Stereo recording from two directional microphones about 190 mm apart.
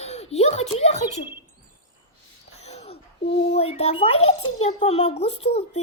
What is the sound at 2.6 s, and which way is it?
A child's voice, 35° left (ahead or behind).